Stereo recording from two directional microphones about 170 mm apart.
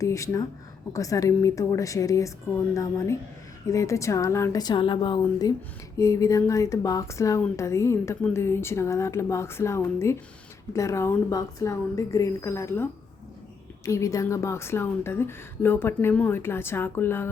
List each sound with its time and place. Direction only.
0.0 s a woman's voice: 20° left (ahead or behind)